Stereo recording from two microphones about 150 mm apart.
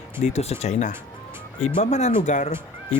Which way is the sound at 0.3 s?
45° left (ahead or behind).